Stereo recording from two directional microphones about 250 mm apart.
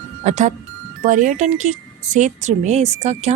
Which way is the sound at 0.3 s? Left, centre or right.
Right.